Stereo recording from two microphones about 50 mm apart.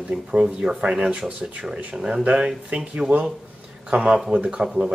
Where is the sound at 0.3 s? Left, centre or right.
Centre.